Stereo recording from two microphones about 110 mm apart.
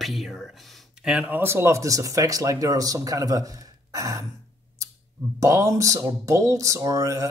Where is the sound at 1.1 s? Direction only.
20° right (ahead or behind).